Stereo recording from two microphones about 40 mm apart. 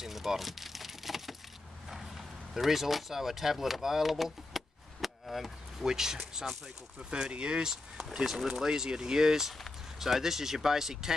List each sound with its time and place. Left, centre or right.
0.0 s vehicle: centre
1.9 s a sound: centre
5.9 s speech: centre